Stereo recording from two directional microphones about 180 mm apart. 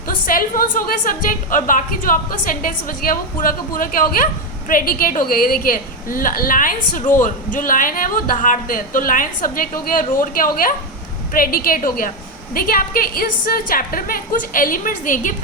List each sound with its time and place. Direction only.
0.1 s a woman's voice: 50° left (ahead or behind)